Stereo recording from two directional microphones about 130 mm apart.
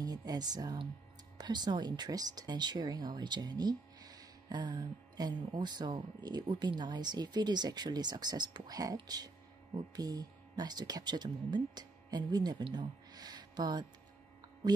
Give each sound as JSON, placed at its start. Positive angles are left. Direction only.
{"t": 0.0, "sound": "speech", "side_deg": -30}